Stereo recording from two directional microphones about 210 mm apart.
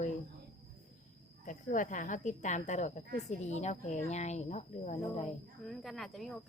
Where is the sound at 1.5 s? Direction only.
40° left (ahead or behind).